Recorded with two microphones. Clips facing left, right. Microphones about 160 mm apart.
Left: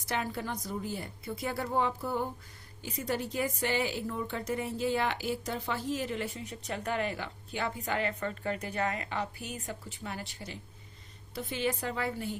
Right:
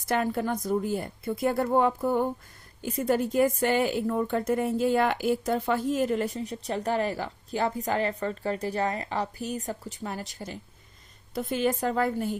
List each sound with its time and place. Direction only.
0.0 s a woman's voice: 50° right (ahead or behind)